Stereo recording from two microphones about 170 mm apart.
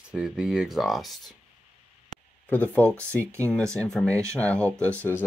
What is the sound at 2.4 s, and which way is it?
Speech, 10° left (ahead or behind).